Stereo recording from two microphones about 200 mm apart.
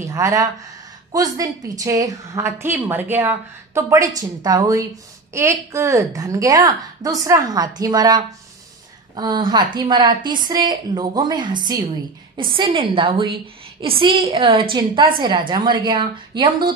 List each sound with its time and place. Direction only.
0.0 s a woman's voice: 15° right (ahead or behind)